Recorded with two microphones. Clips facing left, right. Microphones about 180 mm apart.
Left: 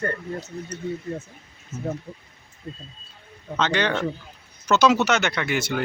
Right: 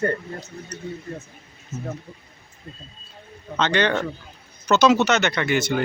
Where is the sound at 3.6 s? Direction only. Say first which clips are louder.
Right 2 dB; 5° left (ahead or behind).